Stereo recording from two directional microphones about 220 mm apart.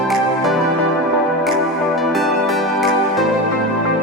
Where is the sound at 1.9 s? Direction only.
Centre (ahead or behind).